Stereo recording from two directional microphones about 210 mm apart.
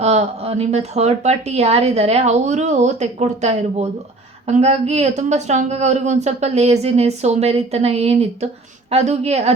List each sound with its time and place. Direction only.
0.0 s speech: 30° right (ahead or behind)